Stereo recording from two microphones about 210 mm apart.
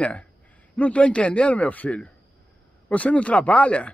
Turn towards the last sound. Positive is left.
turn(degrees=5)  # may be behind; listen again after turning